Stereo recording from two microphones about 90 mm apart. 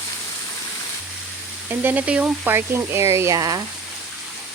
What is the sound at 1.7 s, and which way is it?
Speech, 20° right (ahead or behind).